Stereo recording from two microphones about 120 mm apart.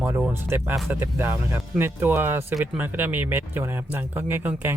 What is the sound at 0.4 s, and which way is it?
Speech, 15° right (ahead or behind).